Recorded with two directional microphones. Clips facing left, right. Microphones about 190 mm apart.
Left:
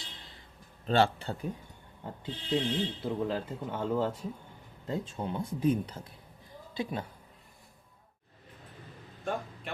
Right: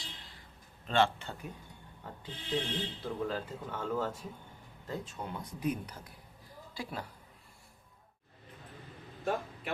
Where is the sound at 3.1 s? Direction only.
25° left (ahead or behind).